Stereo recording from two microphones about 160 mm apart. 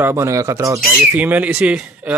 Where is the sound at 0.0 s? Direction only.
15° right (ahead or behind).